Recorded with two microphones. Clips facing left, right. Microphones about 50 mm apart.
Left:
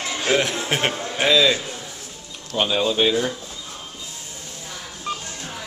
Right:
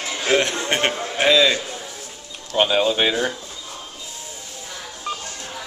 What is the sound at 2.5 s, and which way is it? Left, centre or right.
Speech, right.